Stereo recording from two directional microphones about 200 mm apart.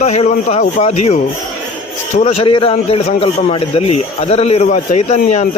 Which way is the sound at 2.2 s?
30° left (ahead or behind).